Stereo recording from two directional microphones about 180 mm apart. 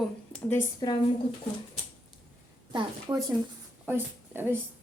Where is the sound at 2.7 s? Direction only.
25° right (ahead or behind).